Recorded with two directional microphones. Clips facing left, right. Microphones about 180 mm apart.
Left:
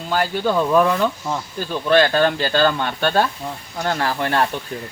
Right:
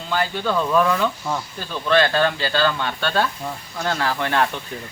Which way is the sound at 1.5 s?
40° left (ahead or behind).